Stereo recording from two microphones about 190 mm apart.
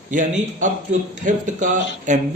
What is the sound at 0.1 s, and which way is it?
A man's voice, 45° right (ahead or behind).